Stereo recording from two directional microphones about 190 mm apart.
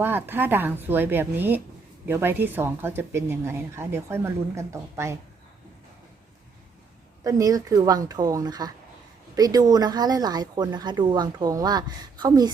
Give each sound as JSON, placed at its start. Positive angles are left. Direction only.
{"t": 0.0, "sound": "speech", "side_deg": -10}
{"t": 7.3, "sound": "speech", "side_deg": -20}